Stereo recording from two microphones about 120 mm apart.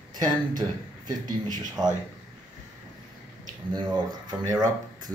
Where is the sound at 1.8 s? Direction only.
35° right (ahead or behind).